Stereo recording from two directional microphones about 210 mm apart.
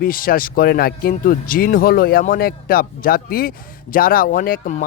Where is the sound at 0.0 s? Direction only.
45° left (ahead or behind).